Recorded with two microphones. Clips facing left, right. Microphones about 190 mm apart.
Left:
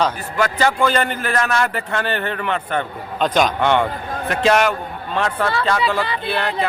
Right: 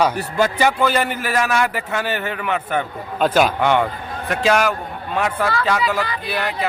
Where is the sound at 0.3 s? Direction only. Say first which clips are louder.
Right 1 dB; 20° right (ahead or behind).